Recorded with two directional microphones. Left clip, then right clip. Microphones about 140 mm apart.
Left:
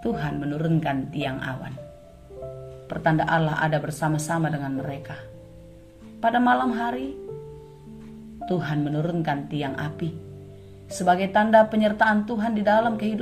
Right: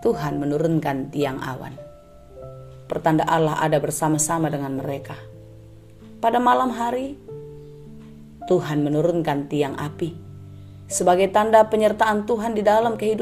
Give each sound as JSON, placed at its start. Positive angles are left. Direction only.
{"t": 0.0, "sound": "speech", "side_deg": -55}
{"t": 2.9, "sound": "a woman's voice", "side_deg": -50}
{"t": 8.4, "sound": "a woman's voice", "side_deg": -50}